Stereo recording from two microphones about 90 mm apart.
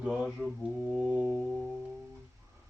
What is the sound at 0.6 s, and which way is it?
Mantra, 5° right (ahead or behind).